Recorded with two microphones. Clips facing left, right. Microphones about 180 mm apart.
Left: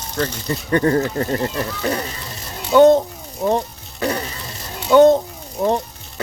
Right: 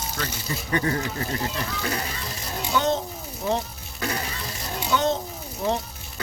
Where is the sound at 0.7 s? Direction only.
45° left (ahead or behind).